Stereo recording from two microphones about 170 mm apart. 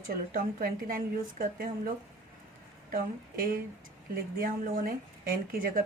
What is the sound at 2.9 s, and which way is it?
A woman's voice, 55° right (ahead or behind).